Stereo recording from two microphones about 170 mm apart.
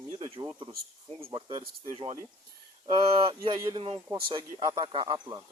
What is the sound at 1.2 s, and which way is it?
Speech, 30° right (ahead or behind).